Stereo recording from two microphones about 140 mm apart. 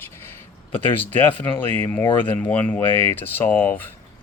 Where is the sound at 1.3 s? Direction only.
35° left (ahead or behind).